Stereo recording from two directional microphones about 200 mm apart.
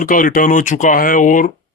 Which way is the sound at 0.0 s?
45° left (ahead or behind).